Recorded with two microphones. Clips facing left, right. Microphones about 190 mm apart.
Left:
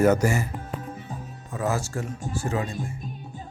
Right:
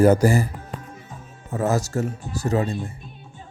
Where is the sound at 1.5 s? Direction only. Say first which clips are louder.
Right 5 dB; 40° right (ahead or behind).